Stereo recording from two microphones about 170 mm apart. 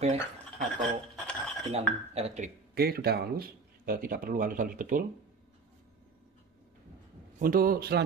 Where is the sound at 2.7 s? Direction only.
65° right (ahead or behind).